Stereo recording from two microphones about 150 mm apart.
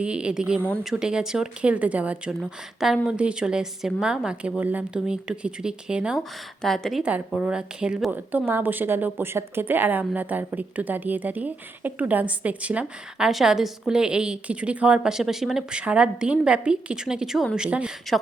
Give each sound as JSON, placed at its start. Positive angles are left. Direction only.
{"t": 0.0, "sound": "speech", "side_deg": -5}